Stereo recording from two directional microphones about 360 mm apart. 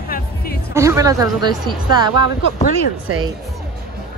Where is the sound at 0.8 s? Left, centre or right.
Centre.